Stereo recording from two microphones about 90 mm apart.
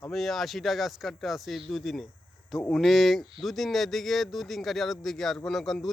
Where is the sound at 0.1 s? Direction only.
Centre (ahead or behind).